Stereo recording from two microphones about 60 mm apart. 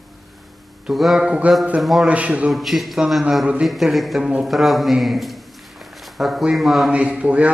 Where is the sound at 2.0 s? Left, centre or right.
Right.